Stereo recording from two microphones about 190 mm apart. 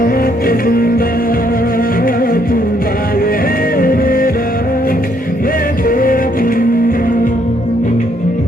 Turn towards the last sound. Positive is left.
turn(degrees=45)  # may be behind; listen again after turning